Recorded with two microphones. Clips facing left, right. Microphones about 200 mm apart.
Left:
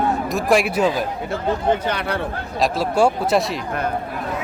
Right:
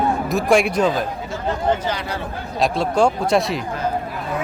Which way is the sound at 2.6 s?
5° left (ahead or behind).